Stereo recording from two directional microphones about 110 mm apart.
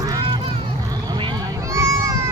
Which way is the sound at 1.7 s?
30° right (ahead or behind).